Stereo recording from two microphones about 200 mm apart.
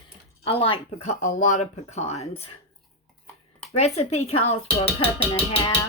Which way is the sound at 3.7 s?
30° left (ahead or behind).